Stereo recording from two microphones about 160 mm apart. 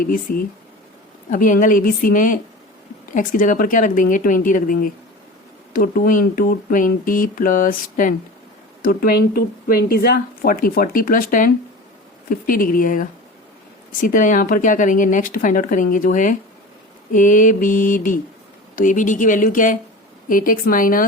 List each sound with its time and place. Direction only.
0.0 s speech: 60° left (ahead or behind)